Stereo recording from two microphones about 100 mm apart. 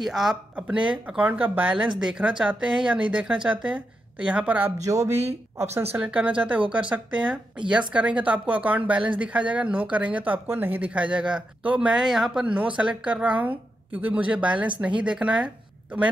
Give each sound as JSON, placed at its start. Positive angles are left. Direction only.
{"t": 0.0, "sound": "speech", "side_deg": -5}
{"t": 4.8, "sound": "speech", "side_deg": -35}
{"t": 5.8, "sound": "speech", "side_deg": -20}